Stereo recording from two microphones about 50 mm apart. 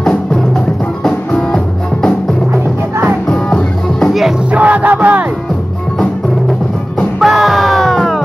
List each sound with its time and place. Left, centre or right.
0.0 s music: centre
3.3 s music: centre
4.5 s music: right
7.2 s music: centre